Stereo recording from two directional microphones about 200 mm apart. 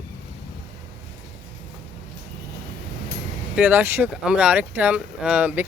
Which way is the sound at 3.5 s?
10° right (ahead or behind).